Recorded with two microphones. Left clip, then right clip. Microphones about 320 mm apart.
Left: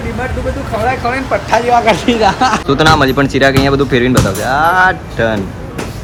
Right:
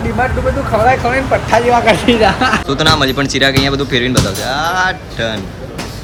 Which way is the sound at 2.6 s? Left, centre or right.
Centre.